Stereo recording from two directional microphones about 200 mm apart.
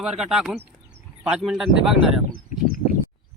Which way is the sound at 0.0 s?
Centre (ahead or behind).